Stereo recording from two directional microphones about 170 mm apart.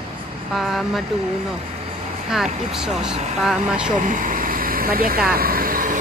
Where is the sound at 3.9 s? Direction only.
50° right (ahead or behind).